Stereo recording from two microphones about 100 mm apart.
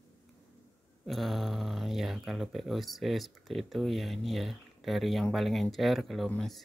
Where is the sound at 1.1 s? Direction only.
Centre (ahead or behind).